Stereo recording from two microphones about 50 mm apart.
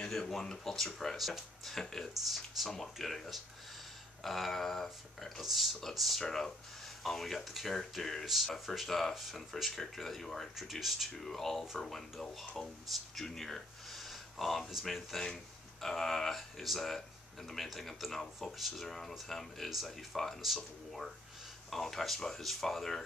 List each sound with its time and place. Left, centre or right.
0.1 s speech: centre